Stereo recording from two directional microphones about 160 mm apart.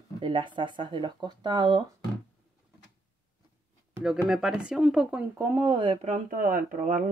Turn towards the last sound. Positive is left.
turn(degrees=-50)  # may be behind; listen again after turning